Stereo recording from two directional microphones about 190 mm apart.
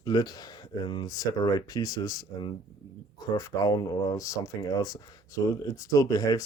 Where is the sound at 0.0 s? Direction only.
20° left (ahead or behind).